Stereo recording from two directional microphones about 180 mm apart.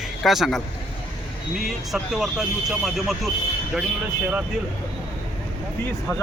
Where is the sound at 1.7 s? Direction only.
Centre (ahead or behind).